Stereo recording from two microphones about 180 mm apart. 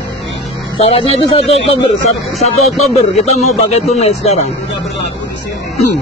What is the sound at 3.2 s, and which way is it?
Speech, 35° left (ahead or behind).